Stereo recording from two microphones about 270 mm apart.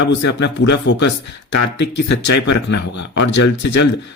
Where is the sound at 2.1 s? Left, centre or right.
Left.